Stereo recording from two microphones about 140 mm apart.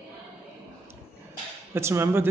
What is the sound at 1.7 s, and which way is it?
Speech, 20° right (ahead or behind).